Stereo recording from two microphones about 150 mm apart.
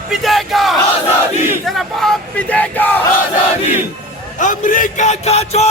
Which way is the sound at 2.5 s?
10° left (ahead or behind).